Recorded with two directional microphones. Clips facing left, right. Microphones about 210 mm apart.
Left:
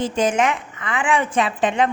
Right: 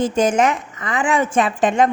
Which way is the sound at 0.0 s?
45° right (ahead or behind).